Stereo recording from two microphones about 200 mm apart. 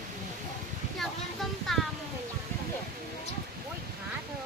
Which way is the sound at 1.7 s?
Centre (ahead or behind).